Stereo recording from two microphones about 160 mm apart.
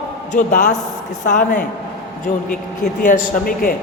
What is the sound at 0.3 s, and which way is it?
A man's voice, 50° left (ahead or behind).